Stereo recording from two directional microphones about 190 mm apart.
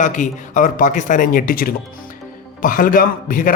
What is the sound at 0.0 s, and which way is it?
A man's voice, 40° left (ahead or behind).